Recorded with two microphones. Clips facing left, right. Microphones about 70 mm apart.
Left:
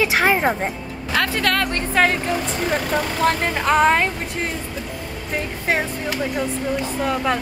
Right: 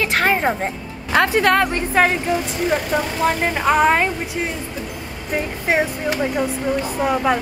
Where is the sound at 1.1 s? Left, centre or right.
Right.